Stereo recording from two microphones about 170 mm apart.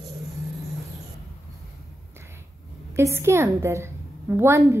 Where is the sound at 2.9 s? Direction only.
15° right (ahead or behind).